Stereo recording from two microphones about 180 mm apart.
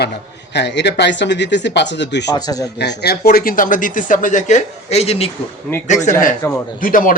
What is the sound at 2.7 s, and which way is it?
Speech, 65° left (ahead or behind).